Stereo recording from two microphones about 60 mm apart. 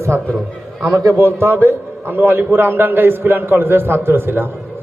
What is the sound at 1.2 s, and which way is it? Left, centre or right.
A man's voice, right.